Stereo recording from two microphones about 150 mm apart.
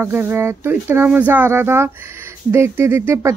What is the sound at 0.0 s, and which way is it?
Speech, 15° right (ahead or behind).